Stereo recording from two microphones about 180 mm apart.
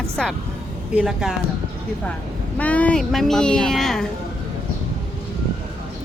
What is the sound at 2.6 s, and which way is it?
Speech, 10° left (ahead or behind).